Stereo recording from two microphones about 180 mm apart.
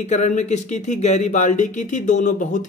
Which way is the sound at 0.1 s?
40° left (ahead or behind).